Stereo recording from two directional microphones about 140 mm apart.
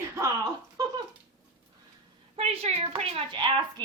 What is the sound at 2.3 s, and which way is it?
A woman's voice, 45° right (ahead or behind).